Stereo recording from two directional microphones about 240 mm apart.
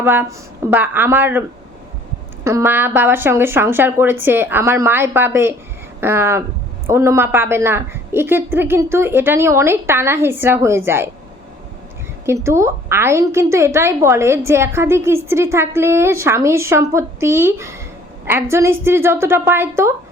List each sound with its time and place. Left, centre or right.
0.0 s a woman's voice: centre
12.2 s a woman's voice: centre